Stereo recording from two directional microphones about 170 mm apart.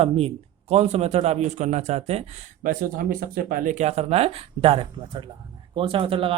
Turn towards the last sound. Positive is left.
turn(degrees=-30)  # may be behind; listen again after turning